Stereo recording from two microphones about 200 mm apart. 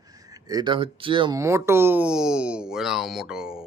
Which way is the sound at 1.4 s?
15° right (ahead or behind).